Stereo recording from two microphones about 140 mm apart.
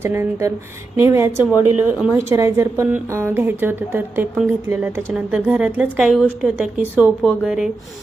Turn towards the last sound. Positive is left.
turn(degrees=-5)  # may be behind; listen again after turning